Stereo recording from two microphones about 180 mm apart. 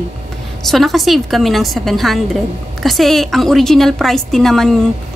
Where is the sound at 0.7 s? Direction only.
Centre (ahead or behind).